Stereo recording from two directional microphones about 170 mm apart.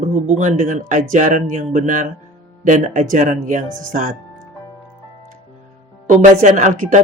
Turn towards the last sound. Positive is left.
turn(degrees=-50)  # may be behind; listen again after turning